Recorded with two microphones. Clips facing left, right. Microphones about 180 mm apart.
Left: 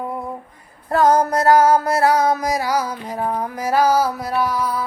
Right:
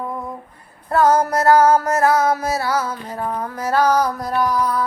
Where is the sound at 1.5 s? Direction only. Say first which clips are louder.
Right 1 dB; 15° left (ahead or behind).